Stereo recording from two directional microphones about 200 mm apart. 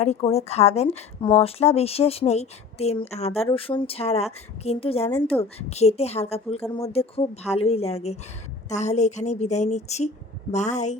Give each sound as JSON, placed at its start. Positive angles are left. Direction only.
{"t": 0.0, "sound": "a woman's voice", "side_deg": 30}